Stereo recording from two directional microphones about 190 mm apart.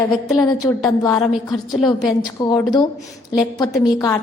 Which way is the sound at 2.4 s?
20° left (ahead or behind).